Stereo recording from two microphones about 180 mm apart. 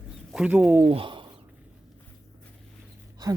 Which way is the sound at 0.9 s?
30° right (ahead or behind).